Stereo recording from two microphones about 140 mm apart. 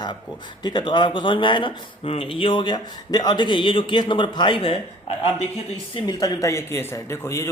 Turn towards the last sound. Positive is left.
turn(degrees=20)  # may be behind; listen again after turning